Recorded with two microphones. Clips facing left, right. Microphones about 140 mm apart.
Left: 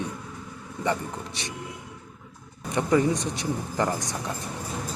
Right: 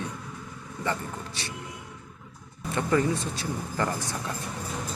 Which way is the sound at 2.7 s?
15° left (ahead or behind).